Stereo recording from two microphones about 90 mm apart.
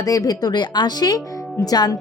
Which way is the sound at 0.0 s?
40° left (ahead or behind).